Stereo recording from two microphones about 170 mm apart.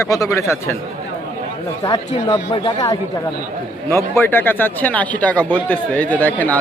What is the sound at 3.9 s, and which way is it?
Speech, 15° left (ahead or behind).